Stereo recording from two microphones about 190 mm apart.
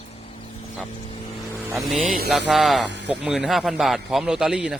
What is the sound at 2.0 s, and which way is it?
Mantra, 45° right (ahead or behind).